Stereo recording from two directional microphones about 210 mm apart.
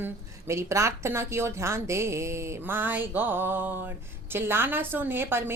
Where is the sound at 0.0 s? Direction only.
15° right (ahead or behind).